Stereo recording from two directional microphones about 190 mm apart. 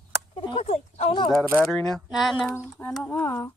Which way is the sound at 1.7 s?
5° left (ahead or behind).